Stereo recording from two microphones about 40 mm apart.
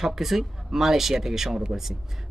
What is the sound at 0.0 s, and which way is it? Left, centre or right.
Speech, centre.